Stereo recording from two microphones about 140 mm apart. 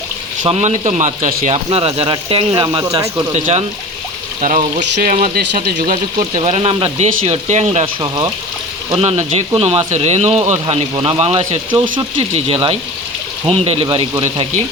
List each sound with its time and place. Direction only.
0.4 s speech: 50° right (ahead or behind)
1.7 s speech: 45° right (ahead or behind)
2.5 s speech: 30° right (ahead or behind)
3.3 s speech: 55° right (ahead or behind); by 6.2 s 85° right
6.4 s speech: 45° right (ahead or behind)
8.0 s speech: 25° right (ahead or behind)
9.0 s speech: 45° right (ahead or behind)
13.5 s speech: 40° right (ahead or behind)